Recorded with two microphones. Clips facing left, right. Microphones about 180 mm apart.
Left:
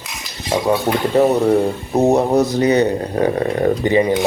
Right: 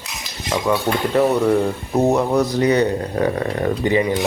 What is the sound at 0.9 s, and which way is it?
Speech, 35° left (ahead or behind).